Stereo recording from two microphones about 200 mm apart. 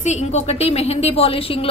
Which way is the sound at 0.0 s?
35° left (ahead or behind).